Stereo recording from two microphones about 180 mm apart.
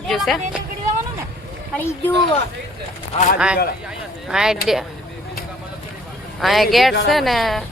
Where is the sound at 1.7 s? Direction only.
10° left (ahead or behind).